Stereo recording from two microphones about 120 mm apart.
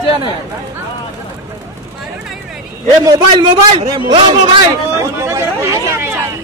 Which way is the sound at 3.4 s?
45° right (ahead or behind).